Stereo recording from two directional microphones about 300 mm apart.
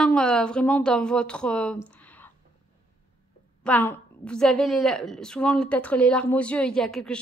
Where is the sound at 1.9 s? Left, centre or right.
Centre.